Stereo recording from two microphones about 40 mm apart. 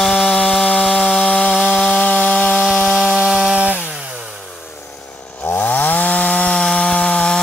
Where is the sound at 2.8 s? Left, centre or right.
Centre.